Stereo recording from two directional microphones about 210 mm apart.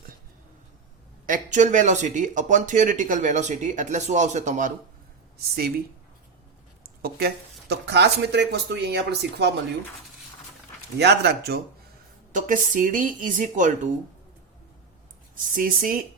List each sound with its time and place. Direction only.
1.3 s speech: 35° right (ahead or behind)
5.5 s speech: 50° right (ahead or behind)
7.0 s speech: 50° right (ahead or behind)
10.9 s speech: 50° right (ahead or behind)
12.3 s speech: 40° right (ahead or behind)
15.5 s speech: 40° right (ahead or behind)